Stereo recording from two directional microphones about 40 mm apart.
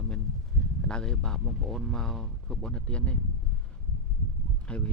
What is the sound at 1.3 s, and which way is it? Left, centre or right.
Speech, centre.